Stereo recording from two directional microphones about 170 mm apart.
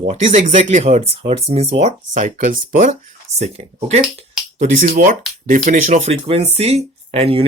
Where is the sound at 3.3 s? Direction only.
40° right (ahead or behind).